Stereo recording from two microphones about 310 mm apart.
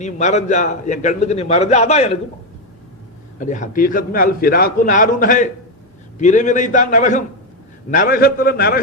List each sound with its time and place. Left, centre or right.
0.0 s a man's voice: left
3.4 s a man's voice: left